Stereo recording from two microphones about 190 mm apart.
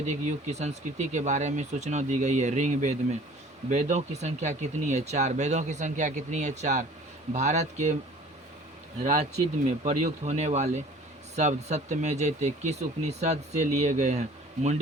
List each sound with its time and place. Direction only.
0.1 s speech: 40° right (ahead or behind)
9.6 s speech: 35° right (ahead or behind)